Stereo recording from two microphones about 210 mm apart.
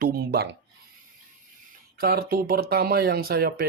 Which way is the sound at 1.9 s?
45° right (ahead or behind).